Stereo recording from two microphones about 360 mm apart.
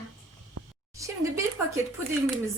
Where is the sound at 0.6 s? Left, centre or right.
Right.